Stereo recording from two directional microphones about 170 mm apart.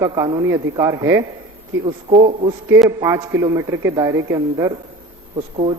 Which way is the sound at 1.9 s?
30° right (ahead or behind).